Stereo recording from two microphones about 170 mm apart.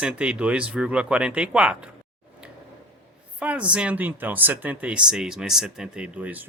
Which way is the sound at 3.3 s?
10° right (ahead or behind).